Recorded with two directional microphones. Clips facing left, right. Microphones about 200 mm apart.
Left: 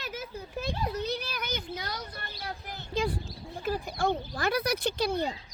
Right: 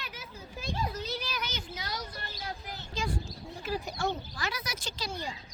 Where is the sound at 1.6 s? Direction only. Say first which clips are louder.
Left 2 dB; 55° left (ahead or behind).